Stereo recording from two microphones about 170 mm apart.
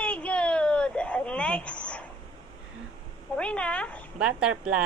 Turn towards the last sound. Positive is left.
turn(degrees=-5)  # may be behind; listen again after turning